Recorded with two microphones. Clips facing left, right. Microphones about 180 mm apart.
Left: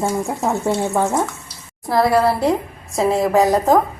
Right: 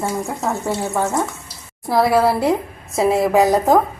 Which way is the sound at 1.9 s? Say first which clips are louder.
Even; centre (ahead or behind).